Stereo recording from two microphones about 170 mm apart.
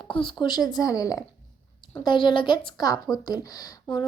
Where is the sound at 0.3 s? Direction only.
25° left (ahead or behind).